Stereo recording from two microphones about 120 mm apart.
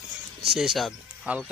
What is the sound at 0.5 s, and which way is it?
Speech, centre (ahead or behind).